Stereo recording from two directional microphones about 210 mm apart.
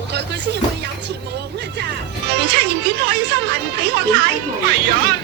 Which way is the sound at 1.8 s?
55° right (ahead or behind).